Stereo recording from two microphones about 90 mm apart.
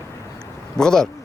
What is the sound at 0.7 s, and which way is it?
Mantra, 5° left (ahead or behind).